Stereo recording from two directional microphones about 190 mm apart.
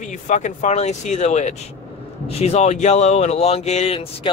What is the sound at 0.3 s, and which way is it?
Speech, 40° left (ahead or behind).